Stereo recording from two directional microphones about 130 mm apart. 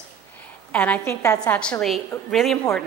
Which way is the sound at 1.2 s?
25° left (ahead or behind).